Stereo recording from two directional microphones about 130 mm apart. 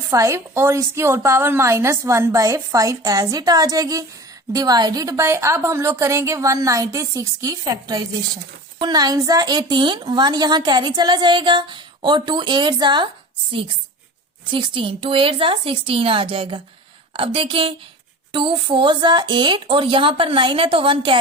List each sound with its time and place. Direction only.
0.1 s a woman's voice: 20° right (ahead or behind)
14.5 s a woman's voice: 40° right (ahead or behind)